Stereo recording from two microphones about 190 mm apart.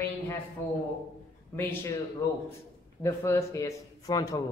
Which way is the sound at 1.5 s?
10° left (ahead or behind).